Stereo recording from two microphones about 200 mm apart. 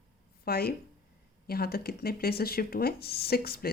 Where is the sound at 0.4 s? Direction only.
50° left (ahead or behind).